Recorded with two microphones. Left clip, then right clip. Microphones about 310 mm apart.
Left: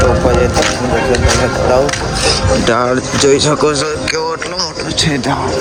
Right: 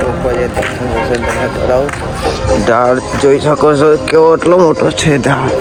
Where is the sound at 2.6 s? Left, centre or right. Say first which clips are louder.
Right 3 dB; centre.